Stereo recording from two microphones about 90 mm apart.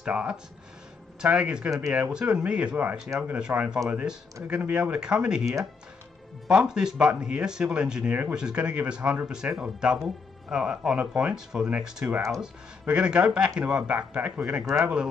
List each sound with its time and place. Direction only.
0.0 s speech: 10° right (ahead or behind)